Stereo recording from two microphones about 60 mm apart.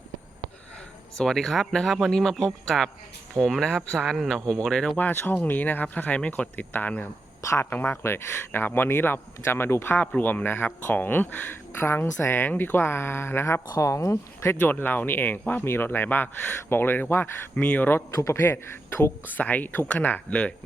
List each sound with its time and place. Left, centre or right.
1.2 s speech: centre
4.9 s speech: left
10.2 s speech: left
13.7 s speech: left
14.4 s speech: left
17.5 s speech: left
18.1 s a man's voice: left
19.3 s speech: left